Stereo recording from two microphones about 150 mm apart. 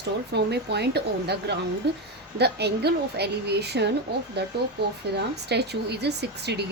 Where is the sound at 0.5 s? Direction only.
90° right.